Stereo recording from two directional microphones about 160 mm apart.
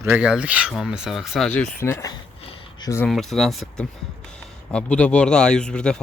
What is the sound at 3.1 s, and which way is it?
Speech, centre (ahead or behind).